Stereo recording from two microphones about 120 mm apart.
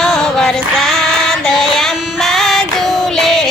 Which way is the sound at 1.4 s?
5° left (ahead or behind).